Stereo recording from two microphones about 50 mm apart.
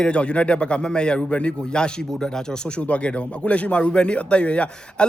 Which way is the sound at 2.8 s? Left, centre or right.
Left.